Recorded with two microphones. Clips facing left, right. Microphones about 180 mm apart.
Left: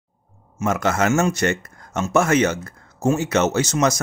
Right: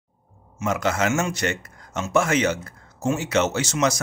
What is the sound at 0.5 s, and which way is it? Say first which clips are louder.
A man's voice: left 3 dB; 45° left (ahead or behind).